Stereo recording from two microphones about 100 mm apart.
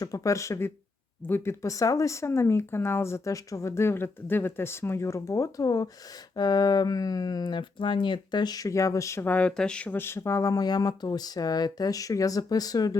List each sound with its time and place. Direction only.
0.0 s speech: 35° left (ahead or behind)
9.2 s speech: 15° left (ahead or behind); by 13.0 s 40° left (ahead or behind)